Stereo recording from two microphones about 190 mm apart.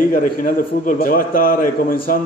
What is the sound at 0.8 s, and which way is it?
Speech, 50° left (ahead or behind).